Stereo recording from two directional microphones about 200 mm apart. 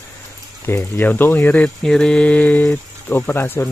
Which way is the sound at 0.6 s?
10° left (ahead or behind).